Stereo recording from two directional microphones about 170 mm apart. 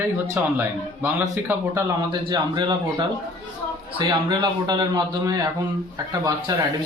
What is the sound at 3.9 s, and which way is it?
Speech, 25° right (ahead or behind).